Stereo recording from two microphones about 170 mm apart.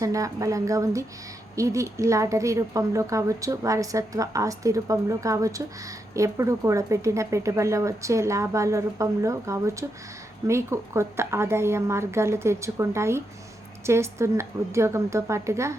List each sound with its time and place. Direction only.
0.0 s a woman's voice: 20° right (ahead or behind)